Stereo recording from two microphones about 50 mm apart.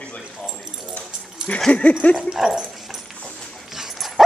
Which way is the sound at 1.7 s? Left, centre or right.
Left.